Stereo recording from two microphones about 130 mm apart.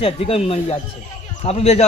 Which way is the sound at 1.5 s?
55° left (ahead or behind).